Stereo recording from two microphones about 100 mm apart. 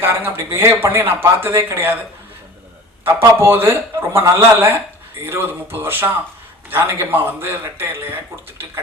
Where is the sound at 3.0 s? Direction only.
25° right (ahead or behind).